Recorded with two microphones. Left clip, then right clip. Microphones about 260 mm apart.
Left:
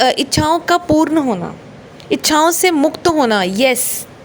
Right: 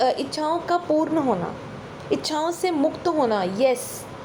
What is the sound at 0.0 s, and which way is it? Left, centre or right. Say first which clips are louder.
A woman's voice: left 8 dB; left.